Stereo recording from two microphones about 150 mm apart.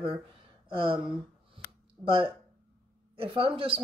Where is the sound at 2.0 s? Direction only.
25° right (ahead or behind).